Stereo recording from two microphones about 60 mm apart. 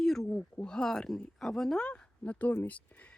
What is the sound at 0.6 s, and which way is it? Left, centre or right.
Speech, centre.